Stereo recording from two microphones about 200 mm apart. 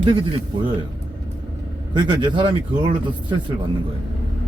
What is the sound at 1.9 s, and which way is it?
Speech, 25° right (ahead or behind).